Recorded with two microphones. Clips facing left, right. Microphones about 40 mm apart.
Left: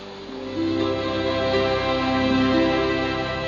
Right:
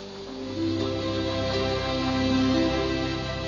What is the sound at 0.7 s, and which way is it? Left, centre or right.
Music, left.